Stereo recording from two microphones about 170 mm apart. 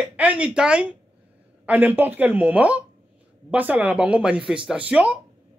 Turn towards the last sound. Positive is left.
turn(degrees=-5)  # may be behind; listen again after turning